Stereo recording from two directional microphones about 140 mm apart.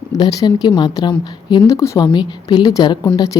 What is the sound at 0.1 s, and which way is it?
A woman's voice, 25° left (ahead or behind).